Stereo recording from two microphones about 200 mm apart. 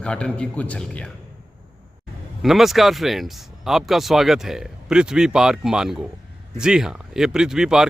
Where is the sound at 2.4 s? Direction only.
Centre (ahead or behind).